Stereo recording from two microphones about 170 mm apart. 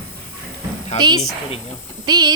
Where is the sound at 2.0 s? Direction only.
25° right (ahead or behind).